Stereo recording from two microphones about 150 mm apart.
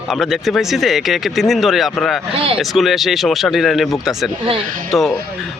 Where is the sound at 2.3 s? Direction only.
40° right (ahead or behind).